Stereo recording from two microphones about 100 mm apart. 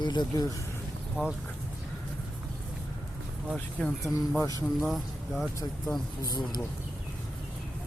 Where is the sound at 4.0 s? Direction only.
35° right (ahead or behind).